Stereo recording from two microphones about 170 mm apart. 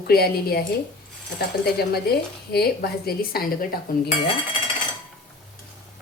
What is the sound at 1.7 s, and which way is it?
A woman's voice, 70° left (ahead or behind).